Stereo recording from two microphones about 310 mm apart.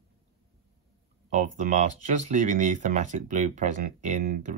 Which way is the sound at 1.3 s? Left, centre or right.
Right.